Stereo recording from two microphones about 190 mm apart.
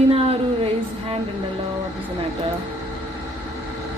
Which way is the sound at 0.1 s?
30° right (ahead or behind).